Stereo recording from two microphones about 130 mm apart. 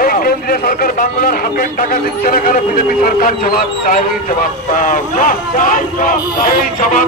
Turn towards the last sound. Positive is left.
turn(degrees=90)